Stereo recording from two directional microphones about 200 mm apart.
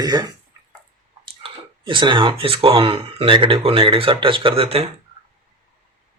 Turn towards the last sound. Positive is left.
turn(degrees=-30)  # may be behind; listen again after turning